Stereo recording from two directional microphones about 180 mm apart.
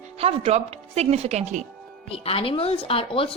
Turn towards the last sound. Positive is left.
turn(degrees=30)  # may be behind; listen again after turning